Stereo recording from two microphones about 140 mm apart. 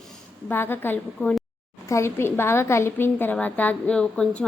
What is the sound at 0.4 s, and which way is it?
A woman's voice, 15° left (ahead or behind).